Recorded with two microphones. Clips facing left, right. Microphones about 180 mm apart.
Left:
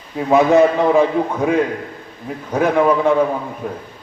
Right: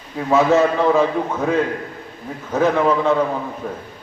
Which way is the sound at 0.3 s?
15° left (ahead or behind).